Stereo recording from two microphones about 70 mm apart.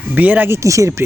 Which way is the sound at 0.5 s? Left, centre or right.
Right.